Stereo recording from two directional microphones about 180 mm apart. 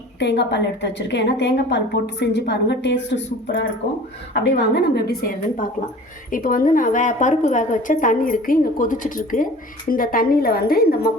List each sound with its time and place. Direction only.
0.2 s a woman's voice: 70° left (ahead or behind)
4.4 s a woman's voice: 75° left (ahead or behind); by 11.1 s 60° left (ahead or behind)